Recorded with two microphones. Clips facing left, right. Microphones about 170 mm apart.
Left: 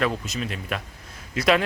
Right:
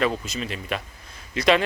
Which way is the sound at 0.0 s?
Centre (ahead or behind).